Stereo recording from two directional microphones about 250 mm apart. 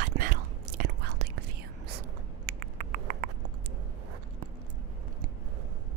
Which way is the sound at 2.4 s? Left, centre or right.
Right.